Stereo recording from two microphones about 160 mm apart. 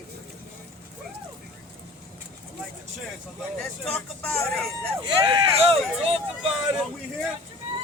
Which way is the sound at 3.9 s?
10° left (ahead or behind).